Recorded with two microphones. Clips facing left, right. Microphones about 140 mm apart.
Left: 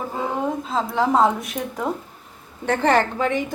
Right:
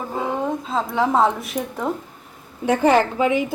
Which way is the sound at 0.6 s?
Centre (ahead or behind).